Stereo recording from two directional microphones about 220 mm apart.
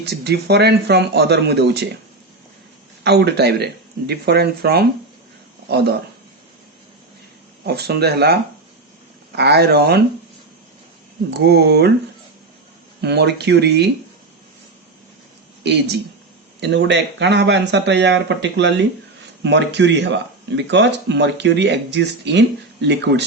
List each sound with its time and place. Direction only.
0.0 s speech: 45° right (ahead or behind)
3.0 s speech: 50° right (ahead or behind)
7.6 s speech: 45° right (ahead or behind)
11.3 s speech: 50° right (ahead or behind)
13.0 s speech: 50° right (ahead or behind)
16.6 s speech: 50° right (ahead or behind)